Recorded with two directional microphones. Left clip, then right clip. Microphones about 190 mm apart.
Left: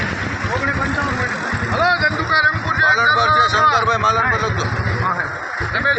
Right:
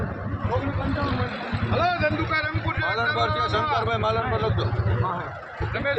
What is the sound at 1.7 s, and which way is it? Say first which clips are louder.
Speech: left 6 dB; 45° right (ahead or behind).